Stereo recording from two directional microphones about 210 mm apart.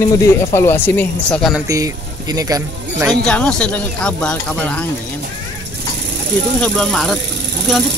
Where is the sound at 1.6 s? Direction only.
15° right (ahead or behind).